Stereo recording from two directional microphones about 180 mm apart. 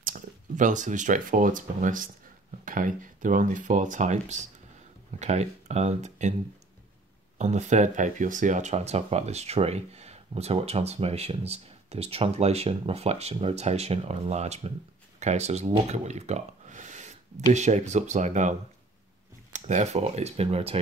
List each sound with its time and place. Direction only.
0.0 s speech: 50° right (ahead or behind)
7.3 s speech: 40° right (ahead or behind)